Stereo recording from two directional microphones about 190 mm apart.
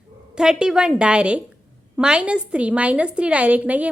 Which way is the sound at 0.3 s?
5° right (ahead or behind).